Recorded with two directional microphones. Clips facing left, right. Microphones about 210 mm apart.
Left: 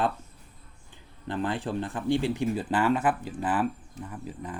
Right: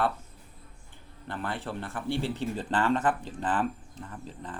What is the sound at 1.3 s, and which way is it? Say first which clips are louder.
Speech: left 5 dB; 15° left (ahead or behind).